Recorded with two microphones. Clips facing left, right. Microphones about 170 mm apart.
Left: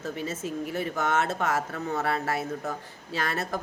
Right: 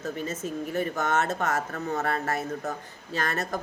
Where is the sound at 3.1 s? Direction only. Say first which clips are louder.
Right 1 dB; 50° right (ahead or behind).